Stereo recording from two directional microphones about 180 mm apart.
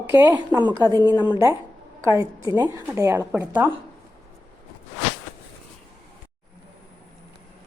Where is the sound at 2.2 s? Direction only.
20° right (ahead or behind).